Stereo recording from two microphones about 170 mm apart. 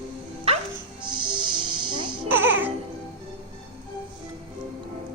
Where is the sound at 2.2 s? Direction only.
10° right (ahead or behind).